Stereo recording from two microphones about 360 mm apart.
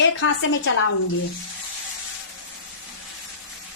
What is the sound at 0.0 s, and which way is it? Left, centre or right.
Speech, left.